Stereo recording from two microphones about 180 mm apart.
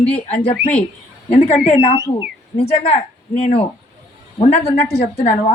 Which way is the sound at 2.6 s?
35° left (ahead or behind).